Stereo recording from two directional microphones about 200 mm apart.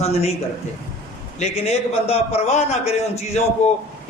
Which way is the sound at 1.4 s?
30° left (ahead or behind).